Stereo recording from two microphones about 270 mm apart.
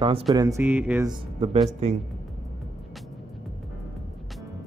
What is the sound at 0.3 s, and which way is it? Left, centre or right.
Speech, centre.